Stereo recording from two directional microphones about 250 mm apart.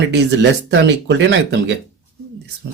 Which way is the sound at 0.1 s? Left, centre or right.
Right.